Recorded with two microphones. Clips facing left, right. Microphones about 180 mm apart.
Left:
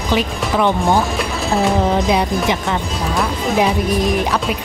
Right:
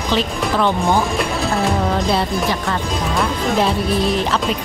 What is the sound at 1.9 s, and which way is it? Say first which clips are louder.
Speech: left 2 dB; 15° left (ahead or behind).